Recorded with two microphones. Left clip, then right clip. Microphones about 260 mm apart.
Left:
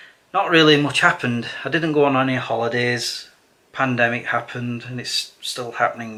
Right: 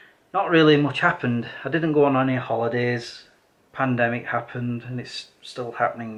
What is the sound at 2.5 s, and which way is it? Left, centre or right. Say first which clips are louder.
Speech: left 1 dB; right.